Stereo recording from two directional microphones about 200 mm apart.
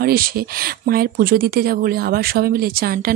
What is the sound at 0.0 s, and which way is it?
Speech, 50° right (ahead or behind).